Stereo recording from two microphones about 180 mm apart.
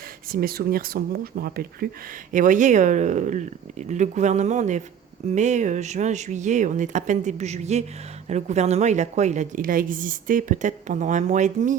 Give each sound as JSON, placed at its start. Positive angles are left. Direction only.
{"t": 0.3, "sound": "speech", "side_deg": -55}
{"t": 2.3, "sound": "a woman's voice", "side_deg": -45}